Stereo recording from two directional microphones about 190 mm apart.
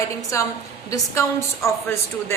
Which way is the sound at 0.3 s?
15° left (ahead or behind).